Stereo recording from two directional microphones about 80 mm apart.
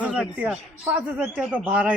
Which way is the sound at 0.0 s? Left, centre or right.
Centre.